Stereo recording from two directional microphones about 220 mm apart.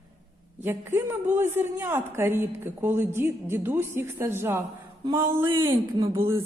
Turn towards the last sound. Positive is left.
turn(degrees=-20)  # may be behind; listen again after turning